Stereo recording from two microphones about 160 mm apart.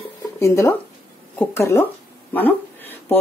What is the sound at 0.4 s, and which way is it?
Speech, 20° left (ahead or behind).